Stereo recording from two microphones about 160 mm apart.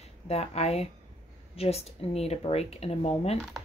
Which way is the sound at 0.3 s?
40° left (ahead or behind).